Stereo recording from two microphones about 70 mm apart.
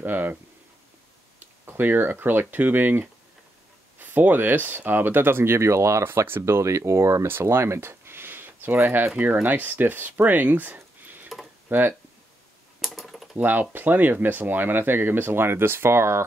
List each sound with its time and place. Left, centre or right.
0.0 s speech: right
1.7 s speech: right
12.8 s typing: centre
13.4 s speech: right